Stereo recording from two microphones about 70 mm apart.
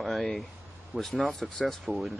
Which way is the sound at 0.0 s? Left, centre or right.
Centre.